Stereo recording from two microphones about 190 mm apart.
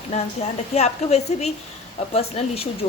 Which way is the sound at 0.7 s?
35° left (ahead or behind).